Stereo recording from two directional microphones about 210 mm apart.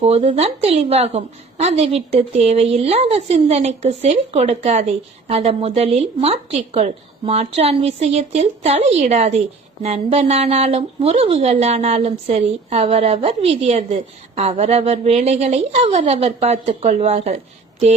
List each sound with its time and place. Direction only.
0.0 s a woman's voice: 30° right (ahead or behind)